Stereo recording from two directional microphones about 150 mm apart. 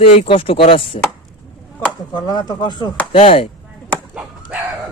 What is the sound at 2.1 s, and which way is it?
Speech, 25° left (ahead or behind).